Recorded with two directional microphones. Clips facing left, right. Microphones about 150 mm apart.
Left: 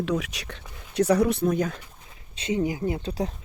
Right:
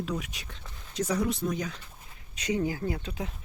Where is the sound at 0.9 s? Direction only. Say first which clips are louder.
Left 8 dB; 65° left (ahead or behind).